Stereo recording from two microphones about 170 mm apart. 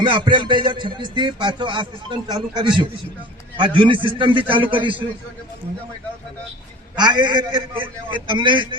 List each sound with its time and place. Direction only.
0.1 s speech: 30° right (ahead or behind)
6.9 s speech: 25° right (ahead or behind)